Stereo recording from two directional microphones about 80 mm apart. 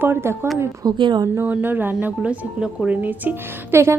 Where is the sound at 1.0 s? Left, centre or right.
Right.